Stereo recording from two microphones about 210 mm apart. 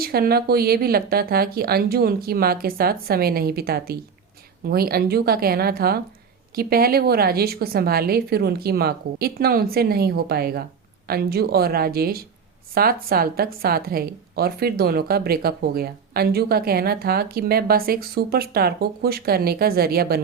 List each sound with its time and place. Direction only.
0.0 s a woman's voice: 45° right (ahead or behind)